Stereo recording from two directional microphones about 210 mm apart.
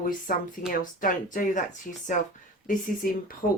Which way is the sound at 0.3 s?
40° left (ahead or behind).